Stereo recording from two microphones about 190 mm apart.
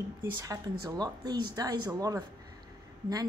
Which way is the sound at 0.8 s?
20° right (ahead or behind).